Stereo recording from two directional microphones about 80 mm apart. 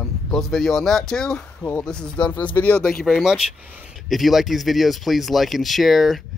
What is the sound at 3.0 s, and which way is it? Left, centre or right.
Speech, centre.